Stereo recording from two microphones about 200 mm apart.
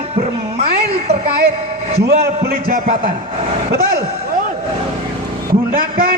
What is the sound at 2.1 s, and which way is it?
Speech, 45° right (ahead or behind).